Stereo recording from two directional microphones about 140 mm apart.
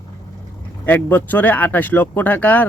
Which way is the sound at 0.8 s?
10° left (ahead or behind).